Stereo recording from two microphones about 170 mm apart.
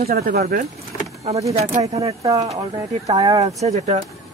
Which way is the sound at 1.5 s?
35° right (ahead or behind).